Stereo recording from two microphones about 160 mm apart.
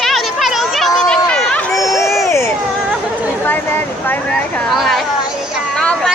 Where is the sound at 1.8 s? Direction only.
20° left (ahead or behind).